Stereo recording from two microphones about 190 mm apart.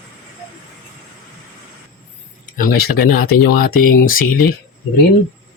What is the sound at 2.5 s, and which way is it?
Speech, 50° left (ahead or behind).